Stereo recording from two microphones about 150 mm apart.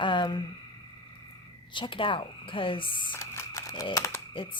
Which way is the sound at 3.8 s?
20° left (ahead or behind).